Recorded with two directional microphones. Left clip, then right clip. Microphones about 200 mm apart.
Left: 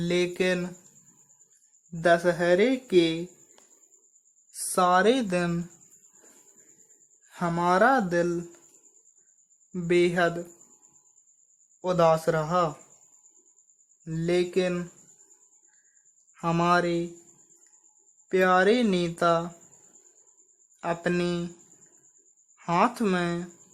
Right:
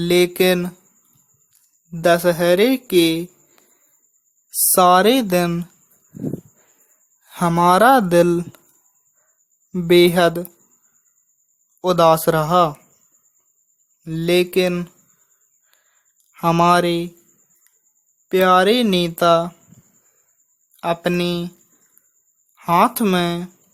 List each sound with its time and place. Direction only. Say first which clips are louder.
0.0 s speech: right 10 dB; 30° right (ahead or behind)
1.9 s speech: right 7 dB; 30° right (ahead or behind)
4.7 s speech: right 9 dB; 30° right (ahead or behind)
7.3 s speech: right 10 dB; 30° right (ahead or behind)
9.7 s speech: right 10 dB; 35° right (ahead or behind)
11.8 s speech: right 8 dB; 30° right (ahead or behind)
14.0 s speech: right 9 dB; 25° right (ahead or behind)
16.3 s speech: right 9 dB; 25° right (ahead or behind)
18.3 s speech: right 7 dB; 25° right (ahead or behind)
20.8 s speech: right 8 dB; 25° right (ahead or behind)
22.5 s speech: right 9 dB; 25° right (ahead or behind)